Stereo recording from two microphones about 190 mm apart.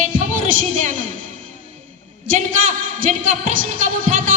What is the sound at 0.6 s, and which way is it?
Speech, 40° right (ahead or behind).